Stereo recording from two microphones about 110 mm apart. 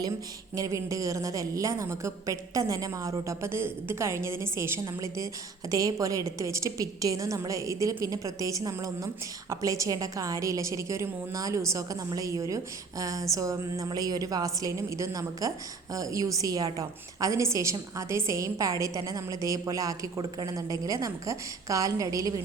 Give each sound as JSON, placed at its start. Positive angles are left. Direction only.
{"t": 0.5, "sound": "a woman's voice", "side_deg": -30}